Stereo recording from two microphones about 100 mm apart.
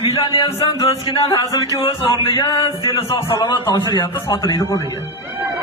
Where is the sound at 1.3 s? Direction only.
35° left (ahead or behind).